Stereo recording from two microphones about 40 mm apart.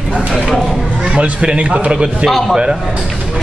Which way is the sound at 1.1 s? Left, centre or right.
Right.